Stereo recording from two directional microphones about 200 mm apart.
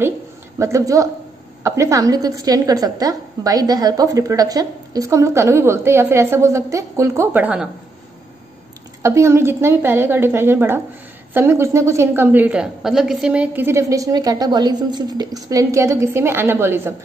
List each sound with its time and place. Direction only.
0.6 s a woman's voice: 15° right (ahead or behind)
9.0 s a woman's voice: 15° right (ahead or behind)